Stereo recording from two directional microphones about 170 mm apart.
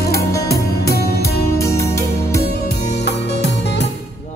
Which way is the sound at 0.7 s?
65° left (ahead or behind).